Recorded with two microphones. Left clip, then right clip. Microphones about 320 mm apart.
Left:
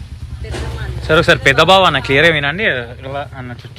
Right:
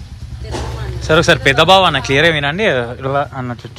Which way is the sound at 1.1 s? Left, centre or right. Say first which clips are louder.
Even; centre.